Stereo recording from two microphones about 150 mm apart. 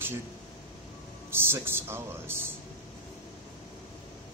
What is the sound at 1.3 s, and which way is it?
Speech, 15° right (ahead or behind).